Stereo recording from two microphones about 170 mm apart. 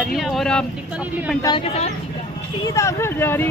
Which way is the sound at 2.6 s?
20° left (ahead or behind).